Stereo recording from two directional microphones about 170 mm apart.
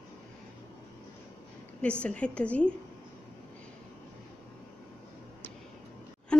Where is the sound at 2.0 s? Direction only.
5° left (ahead or behind).